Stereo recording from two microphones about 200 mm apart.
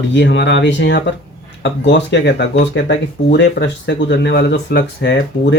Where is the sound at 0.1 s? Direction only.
65° left (ahead or behind).